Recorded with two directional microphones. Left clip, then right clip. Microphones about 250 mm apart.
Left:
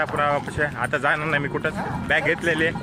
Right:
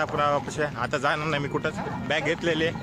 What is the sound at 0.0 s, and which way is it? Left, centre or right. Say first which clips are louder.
Speech: left 2 dB; centre.